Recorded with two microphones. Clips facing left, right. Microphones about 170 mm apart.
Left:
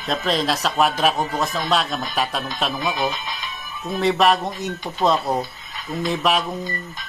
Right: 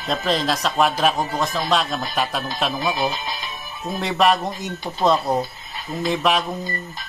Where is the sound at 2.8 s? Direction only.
30° right (ahead or behind).